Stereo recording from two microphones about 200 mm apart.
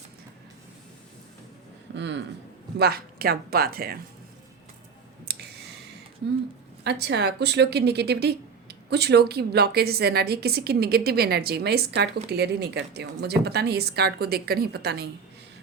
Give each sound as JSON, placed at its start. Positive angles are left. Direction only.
{"t": 2.0, "sound": "a sound", "side_deg": -60}
{"t": 2.7, "sound": "a woman's voice", "side_deg": -50}
{"t": 5.3, "sound": "clicking", "side_deg": -50}
{"t": 6.8, "sound": "a woman's voice", "side_deg": -55}